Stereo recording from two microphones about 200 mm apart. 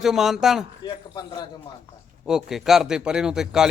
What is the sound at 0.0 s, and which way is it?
Speech, centre (ahead or behind).